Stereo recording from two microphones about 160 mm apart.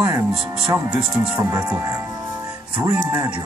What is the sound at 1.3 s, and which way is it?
Speech, 20° right (ahead or behind).